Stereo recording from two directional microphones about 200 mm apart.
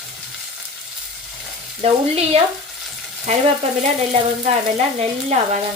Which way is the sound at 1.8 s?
30° right (ahead or behind).